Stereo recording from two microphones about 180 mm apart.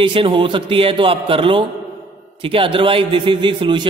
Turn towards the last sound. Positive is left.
turn(degrees=-25)  # may be behind; listen again after turning